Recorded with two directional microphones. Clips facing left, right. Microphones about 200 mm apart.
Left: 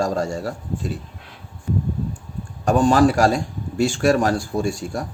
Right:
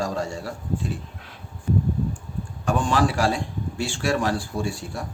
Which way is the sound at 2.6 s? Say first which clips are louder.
Left 7 dB; 45° left (ahead or behind).